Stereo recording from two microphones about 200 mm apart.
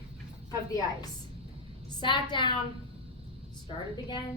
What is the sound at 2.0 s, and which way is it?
Speech, 25° left (ahead or behind).